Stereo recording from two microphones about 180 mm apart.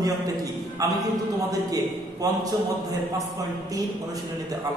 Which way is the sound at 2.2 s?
20° right (ahead or behind).